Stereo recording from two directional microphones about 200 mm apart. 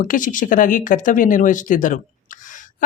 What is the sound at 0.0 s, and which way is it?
Speech, 40° left (ahead or behind).